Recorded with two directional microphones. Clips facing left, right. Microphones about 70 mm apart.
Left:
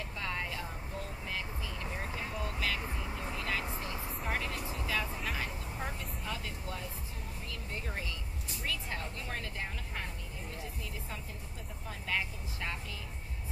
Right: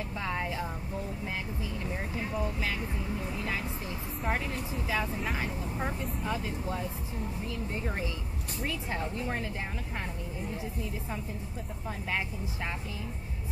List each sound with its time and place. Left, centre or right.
0.2 s a sound: centre
1.3 s speech: centre
3.3 s vehicle: centre
4.3 s speech: centre
7.8 s speech: right
12.1 s speech: right